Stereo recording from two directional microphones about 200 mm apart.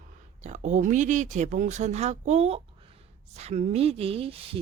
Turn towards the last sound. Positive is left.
turn(degrees=-30)  # may be behind; listen again after turning